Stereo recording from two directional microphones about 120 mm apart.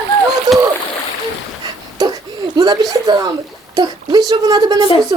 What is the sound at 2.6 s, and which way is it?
Speech, 35° right (ahead or behind).